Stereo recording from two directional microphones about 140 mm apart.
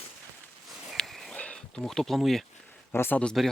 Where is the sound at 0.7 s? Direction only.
Centre (ahead or behind).